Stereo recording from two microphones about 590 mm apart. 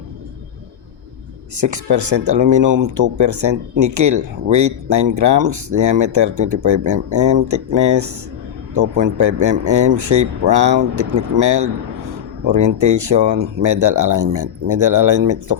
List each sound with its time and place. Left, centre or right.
1.5 s speech: right